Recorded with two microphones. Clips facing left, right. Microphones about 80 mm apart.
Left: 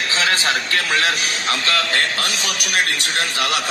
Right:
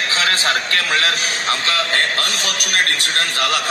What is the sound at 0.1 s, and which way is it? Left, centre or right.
A man's voice, right.